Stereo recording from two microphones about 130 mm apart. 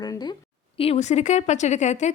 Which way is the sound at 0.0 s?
30° left (ahead or behind).